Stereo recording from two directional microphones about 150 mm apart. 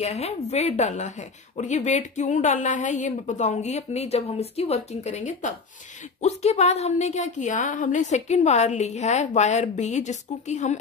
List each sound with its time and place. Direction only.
0.0 s a woman's voice: 45° left (ahead or behind)